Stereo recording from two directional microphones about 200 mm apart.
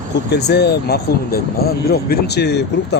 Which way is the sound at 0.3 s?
55° left (ahead or behind).